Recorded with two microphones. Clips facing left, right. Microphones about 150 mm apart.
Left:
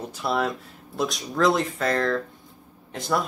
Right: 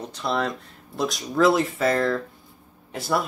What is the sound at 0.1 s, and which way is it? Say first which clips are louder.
Speech: even; 5° left (ahead or behind).